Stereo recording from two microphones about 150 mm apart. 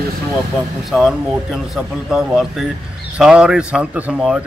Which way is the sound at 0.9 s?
Centre (ahead or behind).